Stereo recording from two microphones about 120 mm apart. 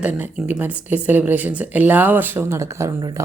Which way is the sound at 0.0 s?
15° right (ahead or behind).